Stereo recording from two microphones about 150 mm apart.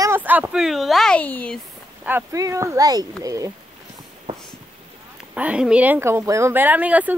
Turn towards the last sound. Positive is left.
turn(degrees=-10)  # may be behind; listen again after turning